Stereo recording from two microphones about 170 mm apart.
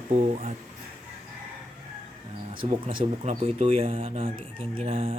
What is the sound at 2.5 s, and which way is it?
Speech, 30° right (ahead or behind).